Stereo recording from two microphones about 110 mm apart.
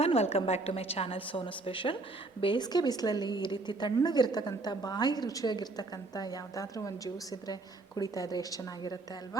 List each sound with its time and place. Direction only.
0.0 s a woman's voice: 70° left (ahead or behind); by 9.4 s 35° left (ahead or behind)